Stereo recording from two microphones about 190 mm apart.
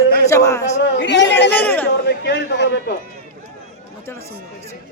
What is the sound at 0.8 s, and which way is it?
Speech, 65° left (ahead or behind).